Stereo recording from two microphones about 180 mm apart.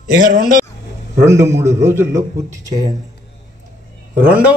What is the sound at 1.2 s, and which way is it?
A man's voice, 15° right (ahead or behind).